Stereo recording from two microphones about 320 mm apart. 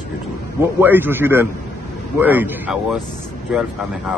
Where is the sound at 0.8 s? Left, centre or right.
Centre.